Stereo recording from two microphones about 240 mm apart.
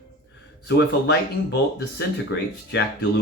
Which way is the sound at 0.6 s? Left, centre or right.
Left.